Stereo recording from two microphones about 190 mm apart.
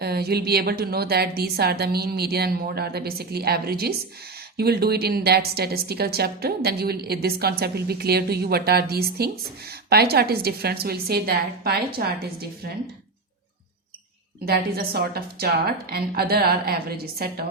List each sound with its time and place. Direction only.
0.0 s a woman's voice: 55° right (ahead or behind)
14.4 s a woman's voice: 55° right (ahead or behind)